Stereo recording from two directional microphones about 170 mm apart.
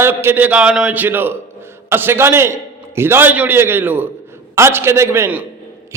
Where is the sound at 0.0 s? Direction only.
15° right (ahead or behind).